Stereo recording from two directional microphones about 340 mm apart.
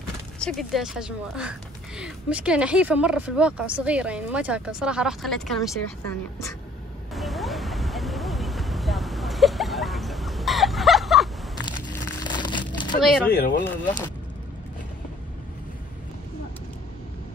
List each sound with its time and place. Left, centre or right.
0.4 s speech: centre
7.2 s vehicle: centre
12.2 s a sound: centre
13.3 s speech: left
13.7 s speech: centre